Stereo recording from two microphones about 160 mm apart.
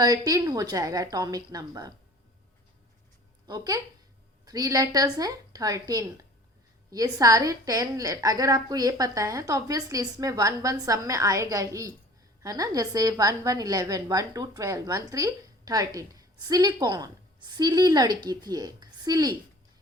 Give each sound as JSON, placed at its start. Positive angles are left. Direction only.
{"t": 0.0, "sound": "a woman's voice", "side_deg": -25}
{"t": 3.4, "sound": "a woman's voice", "side_deg": -25}